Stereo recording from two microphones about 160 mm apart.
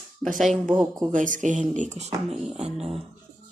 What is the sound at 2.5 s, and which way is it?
Beatboxing, 40° right (ahead or behind).